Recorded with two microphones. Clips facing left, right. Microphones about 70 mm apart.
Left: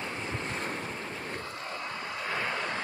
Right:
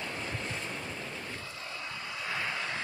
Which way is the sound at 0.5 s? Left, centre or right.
Left.